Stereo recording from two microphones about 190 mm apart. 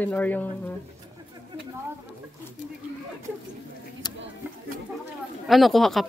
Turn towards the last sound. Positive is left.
turn(degrees=0)  # may be behind; listen again after turning